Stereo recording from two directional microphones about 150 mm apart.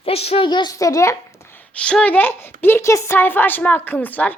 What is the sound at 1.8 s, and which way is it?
A woman's voice, 5° left (ahead or behind).